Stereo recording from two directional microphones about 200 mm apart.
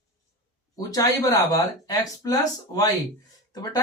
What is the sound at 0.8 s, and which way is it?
Speech, 20° left (ahead or behind).